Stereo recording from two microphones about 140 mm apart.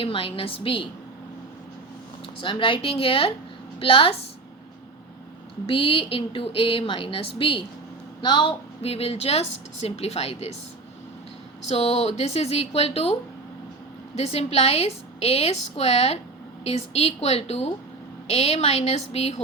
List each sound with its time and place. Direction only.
0.0 s a woman's voice: 40° left (ahead or behind)
2.4 s a woman's voice: 35° left (ahead or behind)
5.6 s a woman's voice: 40° left (ahead or behind)
11.7 s a woman's voice: 45° left (ahead or behind)
14.2 s a woman's voice: 45° left (ahead or behind)